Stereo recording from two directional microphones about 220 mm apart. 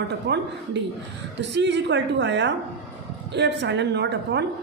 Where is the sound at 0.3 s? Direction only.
50° right (ahead or behind).